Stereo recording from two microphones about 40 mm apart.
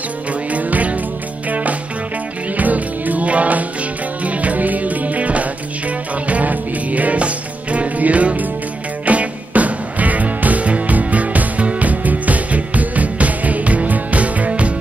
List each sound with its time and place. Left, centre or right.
0.5 s music: right